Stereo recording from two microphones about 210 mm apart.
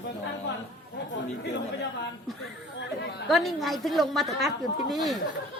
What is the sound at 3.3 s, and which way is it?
Speech, centre (ahead or behind).